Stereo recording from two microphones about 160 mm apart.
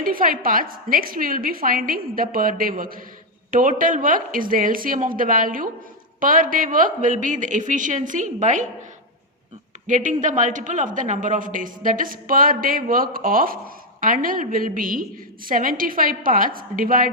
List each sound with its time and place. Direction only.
0.0 s a woman's voice: 60° right (ahead or behind)
9.8 s a woman's voice: 55° right (ahead or behind)